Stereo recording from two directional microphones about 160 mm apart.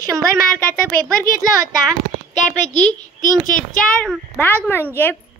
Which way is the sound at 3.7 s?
5° left (ahead or behind).